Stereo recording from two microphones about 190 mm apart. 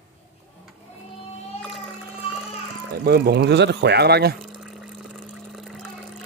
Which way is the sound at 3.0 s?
60° right (ahead or behind).